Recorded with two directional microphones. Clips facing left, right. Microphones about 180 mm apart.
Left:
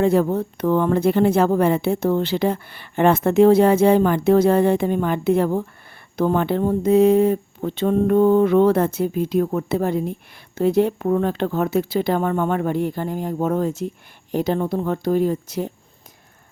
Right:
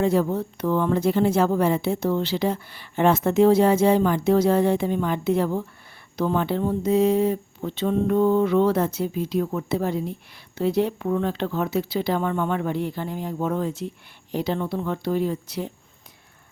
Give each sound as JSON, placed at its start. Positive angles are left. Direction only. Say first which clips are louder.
{"t": 0.0, "sound": "speech", "louder": "left 4 dB", "side_deg": 55}